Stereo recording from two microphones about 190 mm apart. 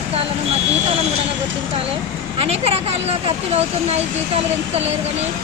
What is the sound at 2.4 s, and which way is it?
Speech, 30° right (ahead or behind).